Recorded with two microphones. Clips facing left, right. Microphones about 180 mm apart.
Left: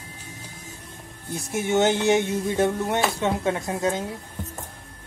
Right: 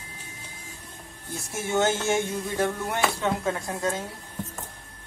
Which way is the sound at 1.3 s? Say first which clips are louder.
Left 4 dB; 15° left (ahead or behind).